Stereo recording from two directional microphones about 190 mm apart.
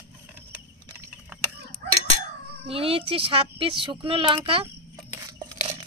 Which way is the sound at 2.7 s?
30° right (ahead or behind).